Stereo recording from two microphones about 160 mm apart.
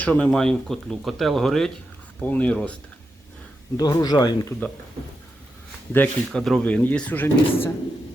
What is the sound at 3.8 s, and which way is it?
Speech, 25° left (ahead or behind).